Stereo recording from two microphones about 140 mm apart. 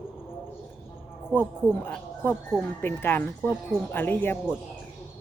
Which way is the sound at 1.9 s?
10° left (ahead or behind).